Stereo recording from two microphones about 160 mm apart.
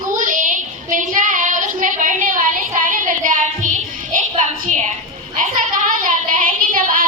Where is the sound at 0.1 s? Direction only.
55° right (ahead or behind).